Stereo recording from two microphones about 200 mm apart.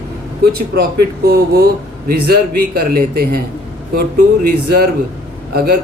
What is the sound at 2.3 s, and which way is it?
Speech, 50° right (ahead or behind).